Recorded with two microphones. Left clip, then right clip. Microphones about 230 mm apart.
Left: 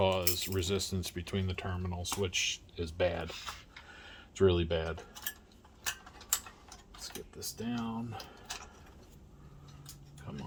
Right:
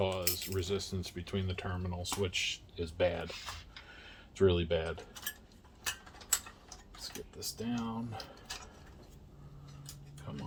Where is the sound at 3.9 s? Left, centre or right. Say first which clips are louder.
Left 2 dB; left.